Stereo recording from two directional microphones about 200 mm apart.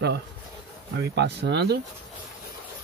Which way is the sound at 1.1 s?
60° right (ahead or behind).